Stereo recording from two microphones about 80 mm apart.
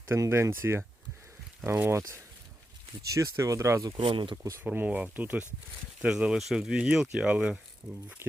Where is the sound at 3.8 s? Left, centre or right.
Right.